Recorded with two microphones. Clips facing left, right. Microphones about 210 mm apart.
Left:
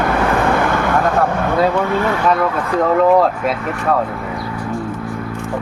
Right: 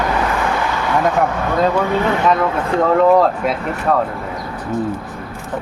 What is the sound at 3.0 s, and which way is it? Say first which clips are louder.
Speech: even; centre (ahead or behind).